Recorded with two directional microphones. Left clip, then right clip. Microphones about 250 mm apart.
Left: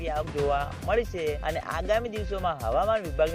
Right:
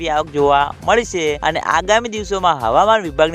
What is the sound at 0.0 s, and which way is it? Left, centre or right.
Speech, right.